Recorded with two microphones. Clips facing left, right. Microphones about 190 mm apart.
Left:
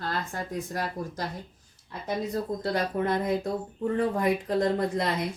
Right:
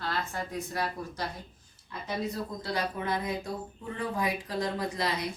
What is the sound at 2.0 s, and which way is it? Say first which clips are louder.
Speech: left 4 dB; 50° left (ahead or behind).